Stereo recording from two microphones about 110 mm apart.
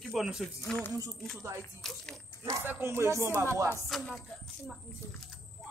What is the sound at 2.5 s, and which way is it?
Speech, 20° right (ahead or behind).